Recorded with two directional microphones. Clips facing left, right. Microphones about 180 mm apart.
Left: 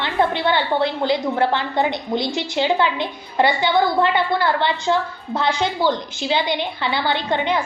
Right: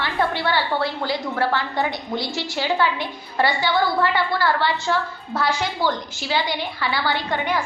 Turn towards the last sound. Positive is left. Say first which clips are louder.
# left 3 dB
turn(degrees=20)  # may be behind; listen again after turning